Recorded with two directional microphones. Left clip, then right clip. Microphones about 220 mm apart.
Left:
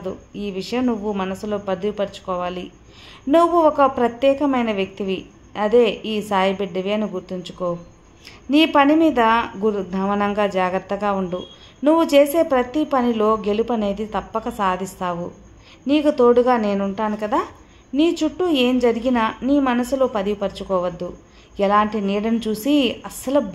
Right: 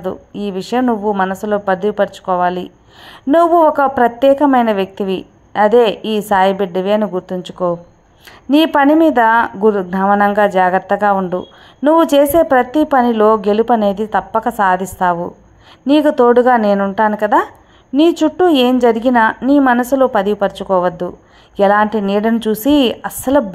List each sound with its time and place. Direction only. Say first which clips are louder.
0.0 s speech: right 7 dB; 20° right (ahead or behind)